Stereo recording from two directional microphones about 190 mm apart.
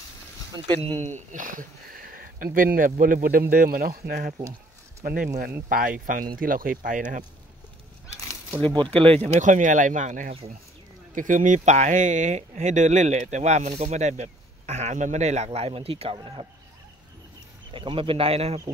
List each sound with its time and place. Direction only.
0.7 s speech: 30° right (ahead or behind)
8.9 s speech: 5° left (ahead or behind)
9.2 s speech: 40° right (ahead or behind)
17.7 s speech: 30° right (ahead or behind)